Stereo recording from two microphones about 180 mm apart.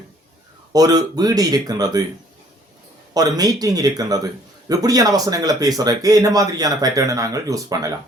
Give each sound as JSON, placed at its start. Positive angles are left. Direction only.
{"t": 0.7, "sound": "speech", "side_deg": -20}
{"t": 3.2, "sound": "speech", "side_deg": -20}